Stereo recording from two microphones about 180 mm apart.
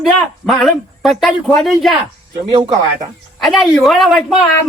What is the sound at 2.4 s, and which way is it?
Speech, 25° right (ahead or behind).